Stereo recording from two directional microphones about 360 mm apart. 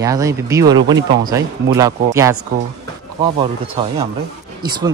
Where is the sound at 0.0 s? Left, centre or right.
Centre.